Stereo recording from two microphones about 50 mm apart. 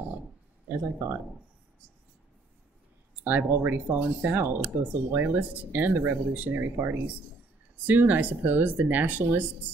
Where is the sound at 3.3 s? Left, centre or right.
Right.